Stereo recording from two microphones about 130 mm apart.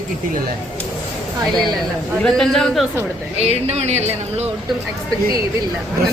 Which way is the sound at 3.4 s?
55° right (ahead or behind).